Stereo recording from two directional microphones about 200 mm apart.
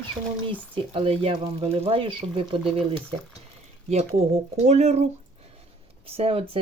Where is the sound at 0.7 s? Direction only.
30° right (ahead or behind).